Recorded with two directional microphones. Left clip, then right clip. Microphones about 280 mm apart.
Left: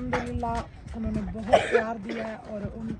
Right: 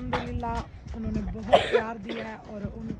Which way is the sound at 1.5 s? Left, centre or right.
Right.